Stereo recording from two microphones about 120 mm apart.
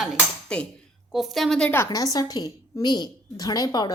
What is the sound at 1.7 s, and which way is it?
A woman's voice, 25° left (ahead or behind).